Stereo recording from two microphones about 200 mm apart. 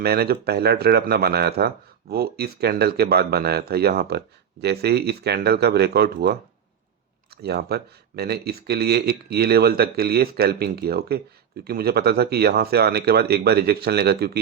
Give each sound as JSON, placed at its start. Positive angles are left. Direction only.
{"t": 0.0, "sound": "speech", "side_deg": -50}
{"t": 7.4, "sound": "speech", "side_deg": -55}